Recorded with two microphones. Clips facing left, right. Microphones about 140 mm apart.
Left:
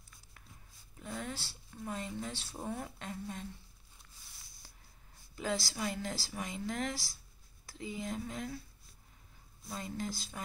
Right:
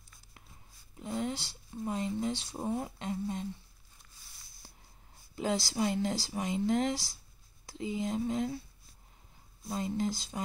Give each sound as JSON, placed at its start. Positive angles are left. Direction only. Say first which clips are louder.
{"t": 0.9, "sound": "a sound", "louder": "right 7 dB", "side_deg": -25}
{"t": 1.7, "sound": "speech", "louder": "right 6 dB", "side_deg": -25}
{"t": 5.3, "sound": "speech", "louder": "right 4 dB", "side_deg": -25}
{"t": 9.7, "sound": "speech", "louder": "right 7 dB", "side_deg": -25}